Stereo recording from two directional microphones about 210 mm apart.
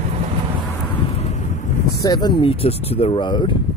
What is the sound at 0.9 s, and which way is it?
Wind noise, 30° left (ahead or behind).